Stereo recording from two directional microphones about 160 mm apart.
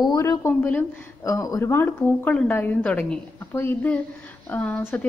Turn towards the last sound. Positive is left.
turn(degrees=10)  # may be behind; listen again after turning